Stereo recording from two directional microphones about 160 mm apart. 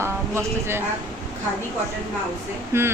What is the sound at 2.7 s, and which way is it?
Speech, 15° right (ahead or behind).